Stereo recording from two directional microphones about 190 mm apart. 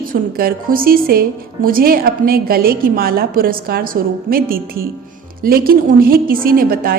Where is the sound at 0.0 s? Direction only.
50° right (ahead or behind).